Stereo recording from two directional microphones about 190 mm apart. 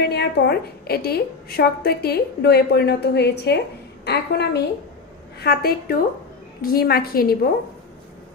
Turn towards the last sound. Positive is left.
turn(degrees=50)  # may be behind; listen again after turning